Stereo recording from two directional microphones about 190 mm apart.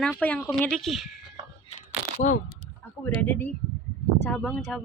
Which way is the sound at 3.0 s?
10° left (ahead or behind).